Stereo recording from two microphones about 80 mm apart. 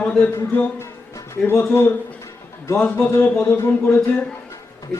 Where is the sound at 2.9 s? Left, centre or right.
Left.